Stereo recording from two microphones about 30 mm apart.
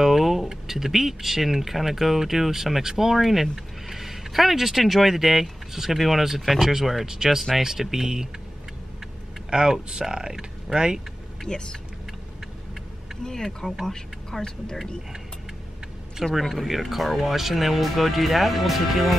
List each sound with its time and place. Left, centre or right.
0.0 s a sound: centre
0.5 s speech: centre
9.5 s speech: right
11.4 s speech: left
13.2 s speech: centre
16.4 s speech: centre